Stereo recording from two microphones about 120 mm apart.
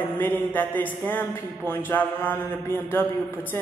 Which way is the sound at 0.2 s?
15° left (ahead or behind).